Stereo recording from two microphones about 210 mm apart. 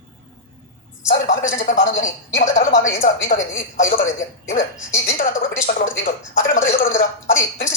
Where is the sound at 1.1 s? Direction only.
35° left (ahead or behind).